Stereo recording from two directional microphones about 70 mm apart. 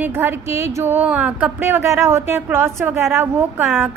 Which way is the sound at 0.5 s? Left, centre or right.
Right.